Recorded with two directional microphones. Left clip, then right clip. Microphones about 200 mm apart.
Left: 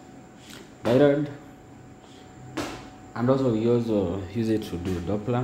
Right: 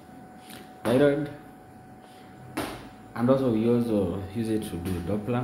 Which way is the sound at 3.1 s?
20° left (ahead or behind).